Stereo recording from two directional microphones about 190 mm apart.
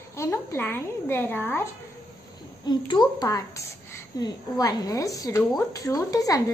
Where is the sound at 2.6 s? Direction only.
25° left (ahead or behind).